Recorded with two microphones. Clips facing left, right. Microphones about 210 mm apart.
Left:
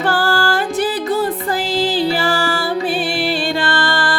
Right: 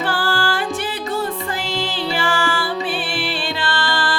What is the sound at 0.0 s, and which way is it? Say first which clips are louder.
Music: left 4 dB; 45° left (ahead or behind).